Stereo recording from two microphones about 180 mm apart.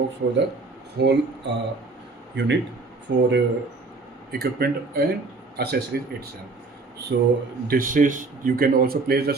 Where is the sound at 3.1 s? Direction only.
75° right (ahead or behind).